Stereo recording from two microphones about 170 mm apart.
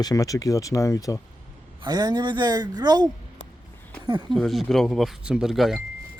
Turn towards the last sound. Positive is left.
turn(degrees=0)  # may be behind; listen again after turning